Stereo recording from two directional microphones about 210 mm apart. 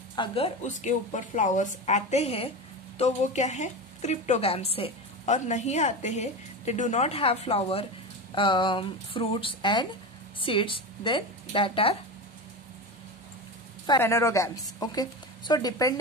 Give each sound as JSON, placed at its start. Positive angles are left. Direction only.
{"t": 0.1, "sound": "a woman's voice", "side_deg": 25}
{"t": 13.8, "sound": "a woman's voice", "side_deg": 10}